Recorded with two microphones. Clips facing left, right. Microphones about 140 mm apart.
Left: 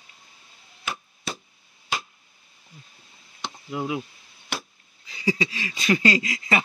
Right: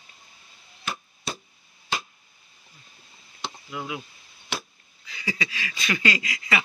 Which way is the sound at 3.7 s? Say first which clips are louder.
Left 6 dB; 35° left (ahead or behind).